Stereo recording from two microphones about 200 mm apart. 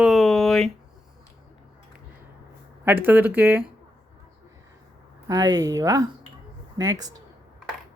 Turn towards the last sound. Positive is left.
turn(degrees=-20)  # may be behind; listen again after turning